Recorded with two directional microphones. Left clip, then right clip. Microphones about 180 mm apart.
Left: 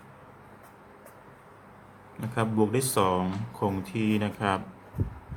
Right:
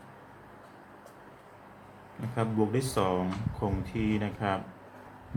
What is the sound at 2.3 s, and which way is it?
Speech, 25° left (ahead or behind).